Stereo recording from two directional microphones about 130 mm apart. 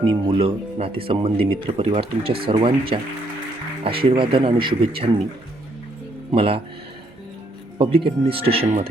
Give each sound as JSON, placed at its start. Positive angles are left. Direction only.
{"t": 0.0, "sound": "speech", "side_deg": -45}
{"t": 6.3, "sound": "speech", "side_deg": -45}
{"t": 7.8, "sound": "speech", "side_deg": -45}